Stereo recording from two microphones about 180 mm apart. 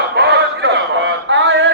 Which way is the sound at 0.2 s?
75° right (ahead or behind).